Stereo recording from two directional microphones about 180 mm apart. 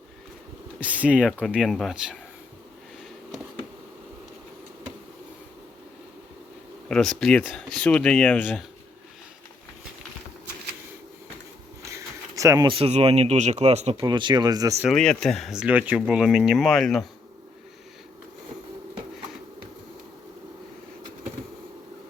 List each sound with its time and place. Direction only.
0.8 s speech: 5° right (ahead or behind)
6.8 s speech: 5° left (ahead or behind)
11.8 s speech: 15° right (ahead or behind); by 14.0 s 35° right (ahead or behind)
14.0 s speech: 25° right (ahead or behind)
14.8 s speech: 5° left (ahead or behind)